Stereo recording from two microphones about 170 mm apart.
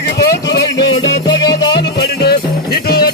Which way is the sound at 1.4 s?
20° left (ahead or behind).